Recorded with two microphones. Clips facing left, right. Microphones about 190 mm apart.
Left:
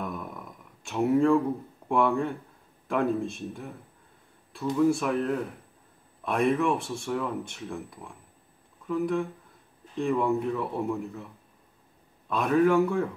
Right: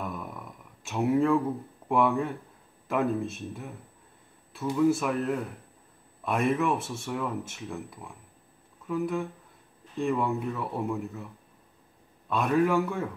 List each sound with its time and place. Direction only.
0.0 s a sound: centre (ahead or behind)
0.8 s speech: centre (ahead or behind)
12.3 s speech: centre (ahead or behind)